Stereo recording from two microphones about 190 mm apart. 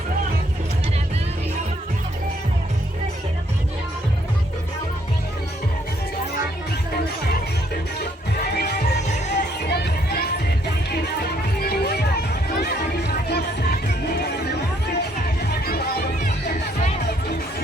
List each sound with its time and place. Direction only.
8.5 s music: 60° left (ahead or behind)